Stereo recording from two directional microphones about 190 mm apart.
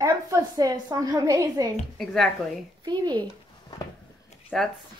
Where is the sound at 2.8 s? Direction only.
20° right (ahead or behind).